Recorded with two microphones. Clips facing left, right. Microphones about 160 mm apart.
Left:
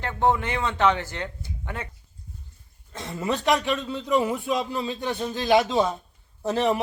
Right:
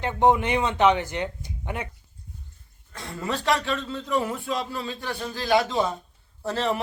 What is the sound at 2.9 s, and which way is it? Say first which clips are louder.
A man's voice: left 3 dB; 20° left (ahead or behind).